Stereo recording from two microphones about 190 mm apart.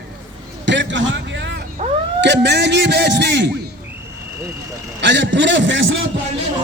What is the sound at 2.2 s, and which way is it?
A man's voice, 65° right (ahead or behind).